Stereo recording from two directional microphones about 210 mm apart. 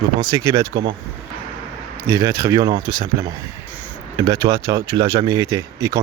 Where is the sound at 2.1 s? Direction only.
15° right (ahead or behind).